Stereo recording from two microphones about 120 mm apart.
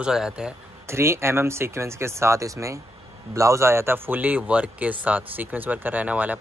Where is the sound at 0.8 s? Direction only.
20° right (ahead or behind).